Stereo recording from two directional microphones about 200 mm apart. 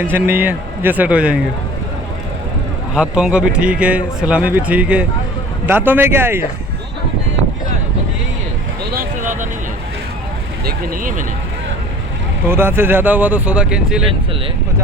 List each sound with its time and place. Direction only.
0.0 s speech: 10° right (ahead or behind)
2.9 s a man's voice: 5° right (ahead or behind)
8.9 s a sound: 45° right (ahead or behind)
10.7 s speech: 40° right (ahead or behind)
12.5 s speech: 10° right (ahead or behind)